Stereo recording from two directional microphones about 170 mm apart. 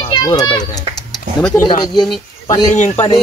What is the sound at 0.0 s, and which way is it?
Children playing, 25° left (ahead or behind).